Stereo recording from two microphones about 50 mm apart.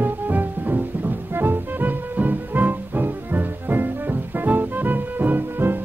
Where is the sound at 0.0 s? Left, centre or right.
Right.